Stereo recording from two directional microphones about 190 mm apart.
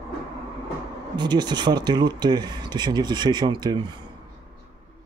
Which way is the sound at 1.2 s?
20° right (ahead or behind).